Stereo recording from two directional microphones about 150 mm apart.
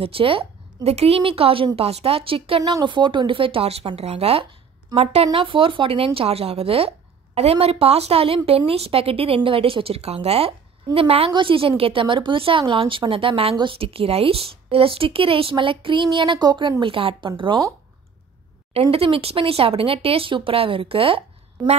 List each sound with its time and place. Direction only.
0.0 s a woman's voice: 40° right (ahead or behind)
18.7 s a woman's voice: 40° right (ahead or behind)